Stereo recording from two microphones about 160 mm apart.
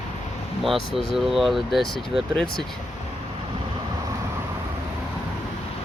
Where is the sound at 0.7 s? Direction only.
Centre (ahead or behind).